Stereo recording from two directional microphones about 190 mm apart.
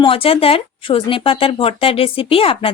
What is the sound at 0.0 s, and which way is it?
A woman's voice, 30° left (ahead or behind).